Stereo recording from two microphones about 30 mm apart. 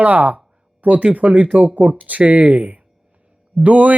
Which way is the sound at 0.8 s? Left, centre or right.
Right.